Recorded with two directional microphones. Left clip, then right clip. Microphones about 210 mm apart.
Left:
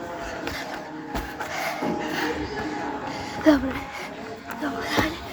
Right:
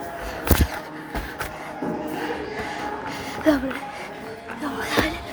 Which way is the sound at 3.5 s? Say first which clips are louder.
Left 1 dB; centre (ahead or behind).